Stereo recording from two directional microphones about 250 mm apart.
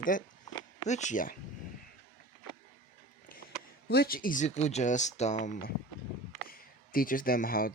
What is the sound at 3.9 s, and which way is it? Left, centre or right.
Speech, left.